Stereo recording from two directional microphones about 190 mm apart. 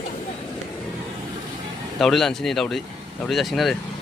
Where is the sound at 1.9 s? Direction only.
Centre (ahead or behind).